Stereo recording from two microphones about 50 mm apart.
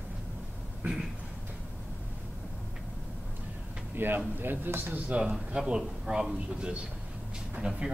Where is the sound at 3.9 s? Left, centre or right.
Right.